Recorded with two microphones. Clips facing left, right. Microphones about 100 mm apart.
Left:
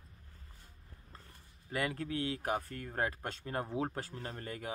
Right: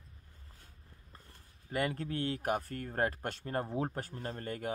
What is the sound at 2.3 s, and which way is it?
Speech, 45° right (ahead or behind).